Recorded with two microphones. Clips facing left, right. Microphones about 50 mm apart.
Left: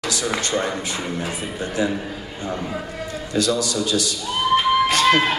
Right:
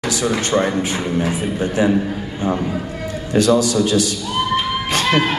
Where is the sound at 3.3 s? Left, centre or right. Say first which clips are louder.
Right 7 dB; right.